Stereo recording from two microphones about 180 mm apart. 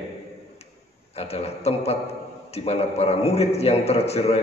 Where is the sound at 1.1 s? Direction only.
35° left (ahead or behind).